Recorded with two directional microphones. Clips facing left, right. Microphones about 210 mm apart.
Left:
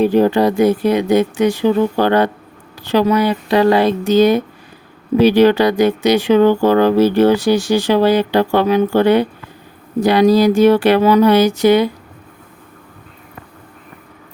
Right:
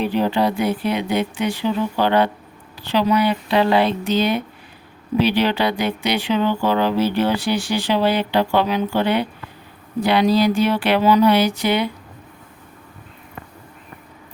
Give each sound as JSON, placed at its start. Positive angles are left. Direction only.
{"t": 0.0, "sound": "speech", "side_deg": 45}